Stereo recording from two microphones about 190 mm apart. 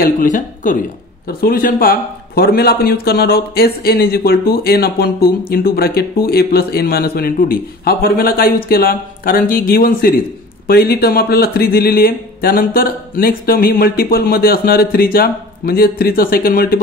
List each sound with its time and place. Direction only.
0.0 s speech: 45° left (ahead or behind)